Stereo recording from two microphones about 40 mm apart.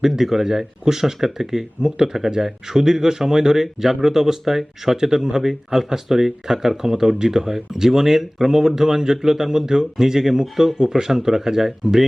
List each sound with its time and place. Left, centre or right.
0.0 s speech: centre